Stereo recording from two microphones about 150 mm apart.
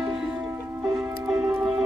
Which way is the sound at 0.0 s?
5° right (ahead or behind).